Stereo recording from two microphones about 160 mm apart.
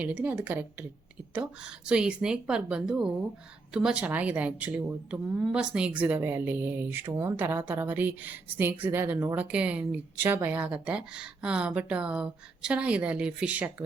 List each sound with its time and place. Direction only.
0.0 s a woman's voice: 10° right (ahead or behind)